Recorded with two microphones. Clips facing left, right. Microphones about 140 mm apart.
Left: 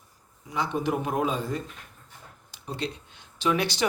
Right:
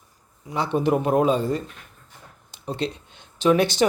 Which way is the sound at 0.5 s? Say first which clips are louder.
Right 6 dB; 30° right (ahead or behind).